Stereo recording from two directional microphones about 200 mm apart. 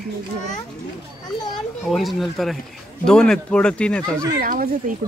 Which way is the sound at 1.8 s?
Centre (ahead or behind).